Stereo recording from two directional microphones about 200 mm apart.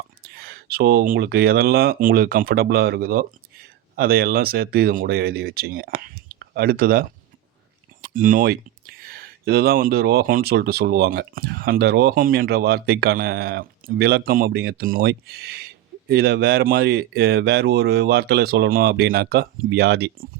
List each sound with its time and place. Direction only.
0.2 s speech: 50° right (ahead or behind)